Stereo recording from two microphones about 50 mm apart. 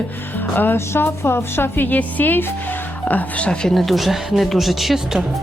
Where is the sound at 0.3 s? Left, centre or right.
Left.